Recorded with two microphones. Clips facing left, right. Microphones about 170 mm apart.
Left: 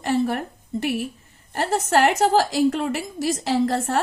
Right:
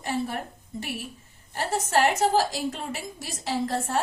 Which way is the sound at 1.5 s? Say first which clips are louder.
Left 5 dB; 65° left (ahead or behind).